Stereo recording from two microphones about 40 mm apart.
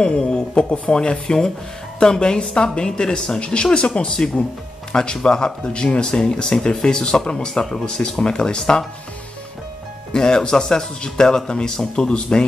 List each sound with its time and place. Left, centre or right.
0.0 s speech: left
10.1 s speech: centre